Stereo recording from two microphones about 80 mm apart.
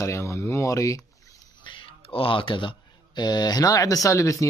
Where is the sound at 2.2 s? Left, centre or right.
Left.